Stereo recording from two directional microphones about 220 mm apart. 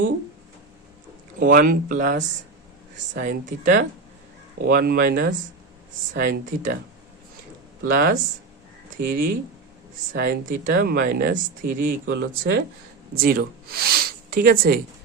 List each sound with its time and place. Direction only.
1.4 s speech: 40° right (ahead or behind)
3.2 s speech: 35° right (ahead or behind)
7.9 s speech: 40° right (ahead or behind)
12.0 s speech: 55° right (ahead or behind)
13.1 s speech: 40° right (ahead or behind)